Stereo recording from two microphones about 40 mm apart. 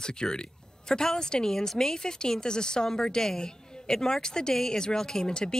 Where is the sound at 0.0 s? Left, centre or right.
Centre.